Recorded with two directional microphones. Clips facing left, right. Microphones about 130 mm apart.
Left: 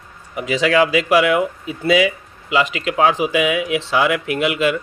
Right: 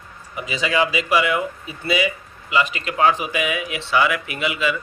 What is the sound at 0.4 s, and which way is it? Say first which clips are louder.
Speech: left 6 dB; 75° left (ahead or behind).